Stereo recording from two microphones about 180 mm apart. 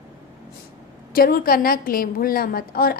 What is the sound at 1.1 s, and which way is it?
A woman's voice, 55° left (ahead or behind).